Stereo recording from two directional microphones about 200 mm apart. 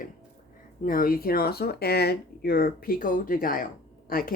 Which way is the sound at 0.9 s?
45° left (ahead or behind).